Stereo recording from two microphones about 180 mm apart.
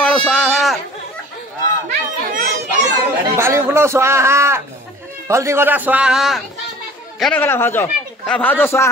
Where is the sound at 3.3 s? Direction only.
15° right (ahead or behind).